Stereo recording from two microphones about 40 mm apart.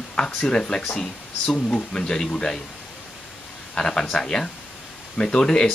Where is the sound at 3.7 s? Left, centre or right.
Centre.